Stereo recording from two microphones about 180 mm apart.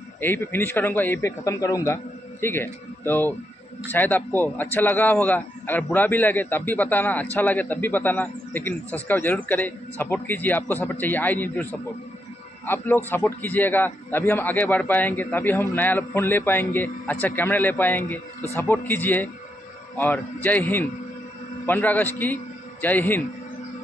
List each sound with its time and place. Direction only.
0.2 s a man's voice: 10° left (ahead or behind)